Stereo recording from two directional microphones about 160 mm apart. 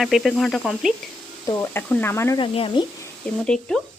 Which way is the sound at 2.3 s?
35° left (ahead or behind).